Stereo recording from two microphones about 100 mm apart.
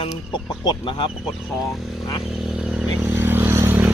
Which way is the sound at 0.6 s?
50° left (ahead or behind).